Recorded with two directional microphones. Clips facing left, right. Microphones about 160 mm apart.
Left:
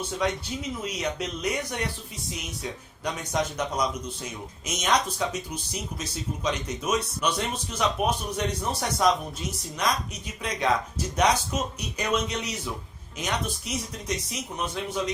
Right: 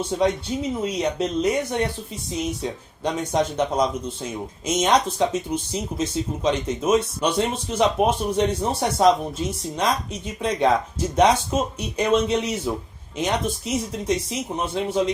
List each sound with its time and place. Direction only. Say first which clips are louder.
0.8 s speech: right 7 dB; 30° right (ahead or behind)
3.0 s speech: right 6 dB; 30° right (ahead or behind)